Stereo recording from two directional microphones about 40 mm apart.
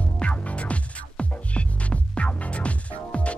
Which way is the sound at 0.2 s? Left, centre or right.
Left.